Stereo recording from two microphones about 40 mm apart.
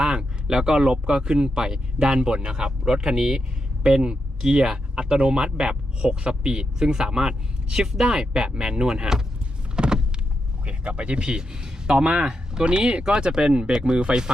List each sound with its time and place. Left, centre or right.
0.0 s speech: right
3.8 s speech: right
9.7 s power windows: centre
10.7 s speech: right